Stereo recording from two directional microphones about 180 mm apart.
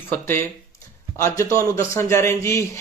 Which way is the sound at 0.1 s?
15° left (ahead or behind).